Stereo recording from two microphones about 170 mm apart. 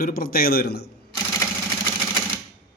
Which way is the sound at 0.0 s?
60° left (ahead or behind).